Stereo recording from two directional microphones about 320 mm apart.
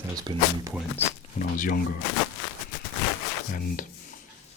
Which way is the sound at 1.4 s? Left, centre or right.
Left.